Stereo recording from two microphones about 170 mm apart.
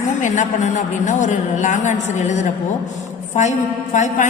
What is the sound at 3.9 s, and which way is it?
Speech, 45° left (ahead or behind).